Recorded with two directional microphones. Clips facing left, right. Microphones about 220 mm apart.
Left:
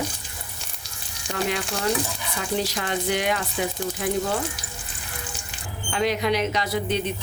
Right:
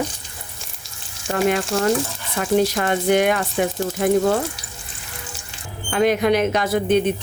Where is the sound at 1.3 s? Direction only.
50° right (ahead or behind).